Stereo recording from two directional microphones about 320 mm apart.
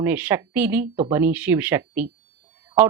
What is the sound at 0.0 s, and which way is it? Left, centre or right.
A woman's voice, centre.